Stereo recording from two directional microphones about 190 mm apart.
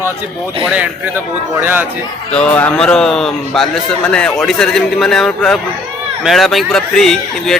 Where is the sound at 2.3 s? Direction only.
5° left (ahead or behind).